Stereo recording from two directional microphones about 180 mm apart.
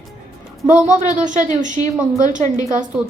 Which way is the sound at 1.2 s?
45° right (ahead or behind).